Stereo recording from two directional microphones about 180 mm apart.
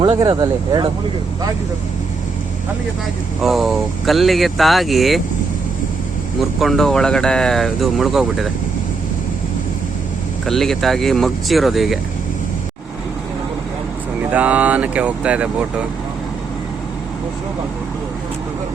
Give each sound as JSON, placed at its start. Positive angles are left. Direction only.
{"t": 0.0, "sound": "speech", "side_deg": -25}
{"t": 3.4, "sound": "speech", "side_deg": 0}
{"t": 6.6, "sound": "speech", "side_deg": 0}
{"t": 10.4, "sound": "speech", "side_deg": 0}
{"t": 14.3, "sound": "speech", "side_deg": -10}